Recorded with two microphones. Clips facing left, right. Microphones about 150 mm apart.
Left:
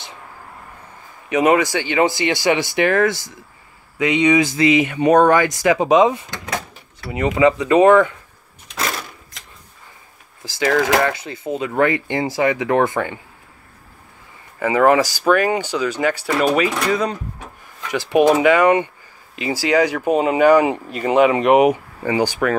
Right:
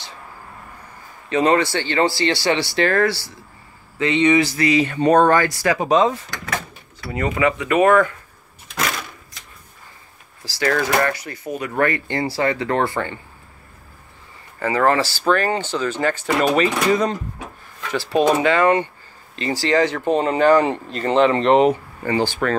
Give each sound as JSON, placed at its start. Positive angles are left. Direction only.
{"t": 1.3, "sound": "speech", "side_deg": 15}
{"t": 8.7, "sound": "a sound", "side_deg": 30}
{"t": 10.4, "sound": "speech", "side_deg": 20}
{"t": 14.6, "sound": "speech", "side_deg": 15}
{"t": 17.9, "sound": "speech", "side_deg": 20}